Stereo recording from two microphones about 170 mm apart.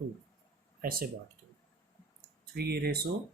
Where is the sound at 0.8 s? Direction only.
60° right (ahead or behind).